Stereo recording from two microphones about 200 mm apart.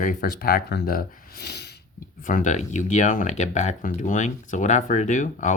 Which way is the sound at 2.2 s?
40° left (ahead or behind).